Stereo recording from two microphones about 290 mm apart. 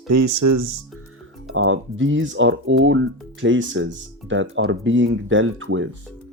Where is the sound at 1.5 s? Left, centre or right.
Right.